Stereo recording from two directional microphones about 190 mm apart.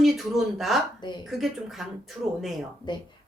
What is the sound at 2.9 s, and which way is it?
Speech, 25° left (ahead or behind).